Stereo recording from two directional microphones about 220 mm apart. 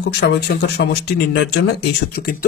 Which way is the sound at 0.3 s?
50° left (ahead or behind).